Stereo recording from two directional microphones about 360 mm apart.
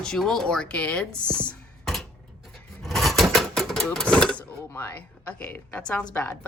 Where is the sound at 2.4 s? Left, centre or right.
Centre.